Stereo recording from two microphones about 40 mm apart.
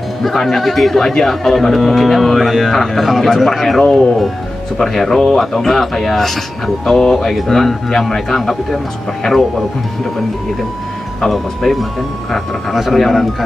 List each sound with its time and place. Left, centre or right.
0.4 s speech: centre
9.2 s speech: centre
11.1 s speech: centre
12.9 s speech: centre